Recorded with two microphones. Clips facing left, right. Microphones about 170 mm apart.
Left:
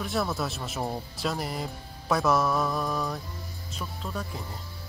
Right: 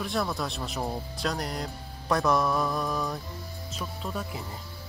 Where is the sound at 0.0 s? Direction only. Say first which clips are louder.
Left 1 dB; centre (ahead or behind).